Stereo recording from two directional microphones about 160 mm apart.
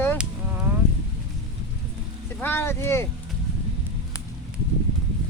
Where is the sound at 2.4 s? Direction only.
15° left (ahead or behind).